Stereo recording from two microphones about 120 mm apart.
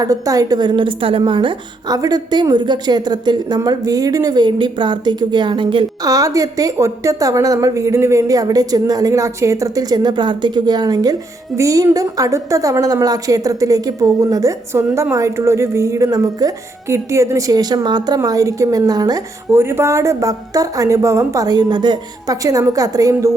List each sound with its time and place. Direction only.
0.0 s a woman's voice: 30° right (ahead or behind); by 2.0 s 45° right (ahead or behind)
2.0 s a woman's voice: 30° right (ahead or behind)
6.1 s a woman's voice: 30° right (ahead or behind)
19.5 s a woman's voice: 20° right (ahead or behind)